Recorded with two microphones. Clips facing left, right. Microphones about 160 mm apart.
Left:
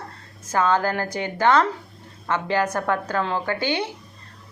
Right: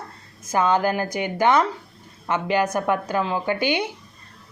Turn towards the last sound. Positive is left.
turn(degrees=-15)  # may be behind; listen again after turning